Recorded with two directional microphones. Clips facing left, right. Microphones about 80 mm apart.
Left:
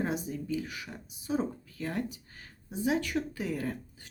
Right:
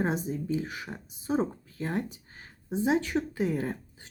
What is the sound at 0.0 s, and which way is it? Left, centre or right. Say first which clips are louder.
Speech: right 3 dB; right.